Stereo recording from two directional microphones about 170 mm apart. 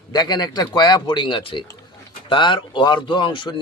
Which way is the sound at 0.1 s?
25° left (ahead or behind).